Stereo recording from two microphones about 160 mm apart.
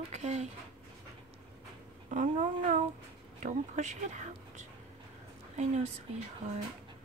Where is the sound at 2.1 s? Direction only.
50° right (ahead or behind).